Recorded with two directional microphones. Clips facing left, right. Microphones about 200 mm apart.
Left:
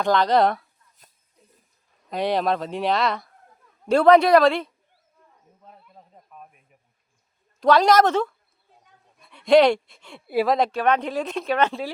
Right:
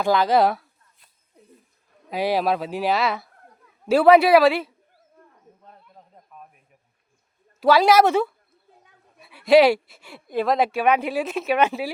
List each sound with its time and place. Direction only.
0.0 s speech: 5° right (ahead or behind)
2.0 s speech: 5° right (ahead or behind)
5.2 s wild animals: 60° right (ahead or behind)
5.6 s a sound: 5° left (ahead or behind)
7.6 s speech: 5° right (ahead or behind)
10.2 s speech: 5° left (ahead or behind)